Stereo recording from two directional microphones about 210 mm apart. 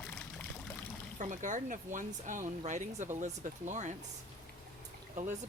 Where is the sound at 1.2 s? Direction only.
35° right (ahead or behind).